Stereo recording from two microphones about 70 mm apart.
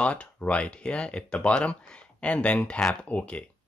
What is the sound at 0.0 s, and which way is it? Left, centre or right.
Speech, centre.